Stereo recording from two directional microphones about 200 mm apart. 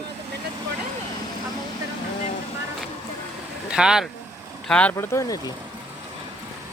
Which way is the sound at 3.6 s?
5° right (ahead or behind).